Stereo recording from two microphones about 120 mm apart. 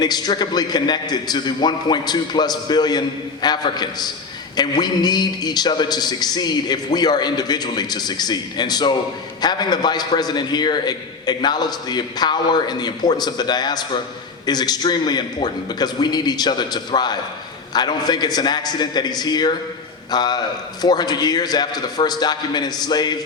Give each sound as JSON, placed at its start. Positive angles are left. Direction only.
{"t": 0.0, "sound": "a man's voice", "side_deg": 35}